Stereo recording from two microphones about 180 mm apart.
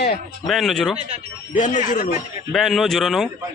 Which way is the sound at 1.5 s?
45° left (ahead or behind).